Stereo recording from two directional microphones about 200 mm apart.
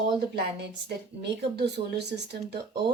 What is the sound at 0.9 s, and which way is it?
A woman's voice, 55° right (ahead or behind).